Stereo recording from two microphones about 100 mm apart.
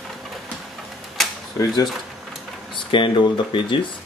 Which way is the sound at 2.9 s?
55° left (ahead or behind).